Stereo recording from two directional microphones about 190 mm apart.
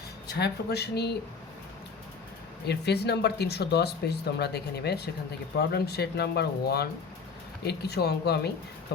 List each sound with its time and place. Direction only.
0.3 s speech: 60° left (ahead or behind)
2.6 s speech: 60° left (ahead or behind)